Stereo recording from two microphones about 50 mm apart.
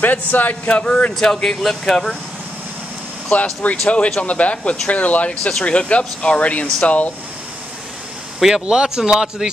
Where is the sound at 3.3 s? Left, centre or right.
Left.